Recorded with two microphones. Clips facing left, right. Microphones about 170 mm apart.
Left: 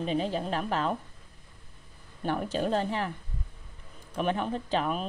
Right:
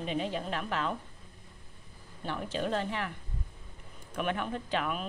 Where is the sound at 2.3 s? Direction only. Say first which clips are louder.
Left 5 dB; 40° left (ahead or behind).